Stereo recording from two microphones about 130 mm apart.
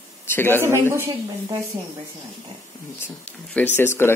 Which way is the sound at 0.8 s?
20° right (ahead or behind).